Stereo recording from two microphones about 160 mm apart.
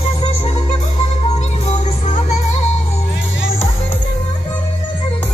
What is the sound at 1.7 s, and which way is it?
Music, 45° left (ahead or behind).